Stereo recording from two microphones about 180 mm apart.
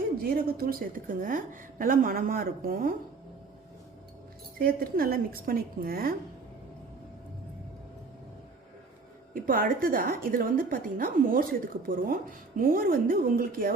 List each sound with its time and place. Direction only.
0.2 s a woman's voice: 55° right (ahead or behind)
4.5 s speech: 55° right (ahead or behind)
9.3 s a woman's voice: 50° right (ahead or behind)